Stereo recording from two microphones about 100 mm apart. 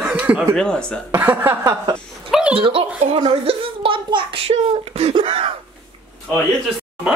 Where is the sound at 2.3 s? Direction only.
10° right (ahead or behind).